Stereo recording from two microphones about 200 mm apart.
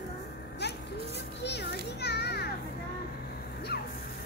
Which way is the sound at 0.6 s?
55° left (ahead or behind).